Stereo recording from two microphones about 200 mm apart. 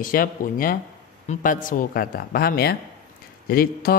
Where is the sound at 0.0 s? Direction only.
45° left (ahead or behind).